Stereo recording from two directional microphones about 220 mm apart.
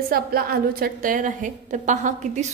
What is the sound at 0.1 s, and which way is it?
A woman's voice, 45° right (ahead or behind).